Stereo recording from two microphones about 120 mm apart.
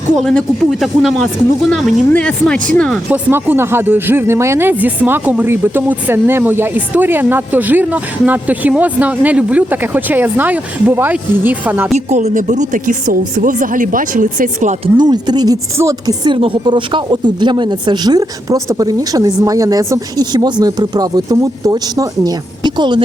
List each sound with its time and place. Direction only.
0.2 s speech: 5° left (ahead or behind)
3.1 s speech: 15° right (ahead or behind)
11.9 s speech: 70° right (ahead or behind); by 14.8 s 90° right
14.9 s speech: 35° right (ahead or behind)